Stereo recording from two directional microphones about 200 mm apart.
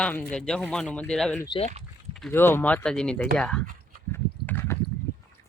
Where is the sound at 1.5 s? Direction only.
30° left (ahead or behind).